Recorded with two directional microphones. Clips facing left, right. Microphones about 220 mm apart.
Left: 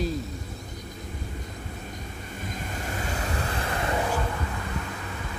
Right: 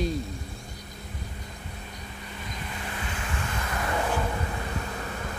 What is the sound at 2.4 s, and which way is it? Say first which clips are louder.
Vehicle: left 3 dB; 45° left (ahead or behind).